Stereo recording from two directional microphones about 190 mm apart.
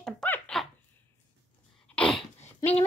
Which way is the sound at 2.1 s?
35° left (ahead or behind).